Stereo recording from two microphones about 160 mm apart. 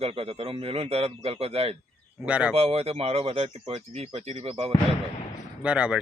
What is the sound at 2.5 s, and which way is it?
A man's voice, 40° right (ahead or behind).